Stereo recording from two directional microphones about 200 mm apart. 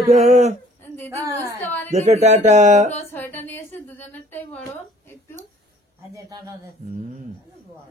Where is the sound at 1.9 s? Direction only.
35° right (ahead or behind).